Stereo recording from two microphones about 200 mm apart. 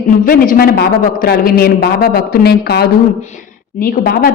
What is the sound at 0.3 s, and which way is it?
A man's voice, 45° left (ahead or behind).